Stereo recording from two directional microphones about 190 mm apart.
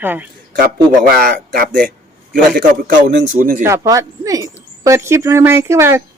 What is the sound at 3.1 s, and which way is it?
Speech, 45° right (ahead or behind).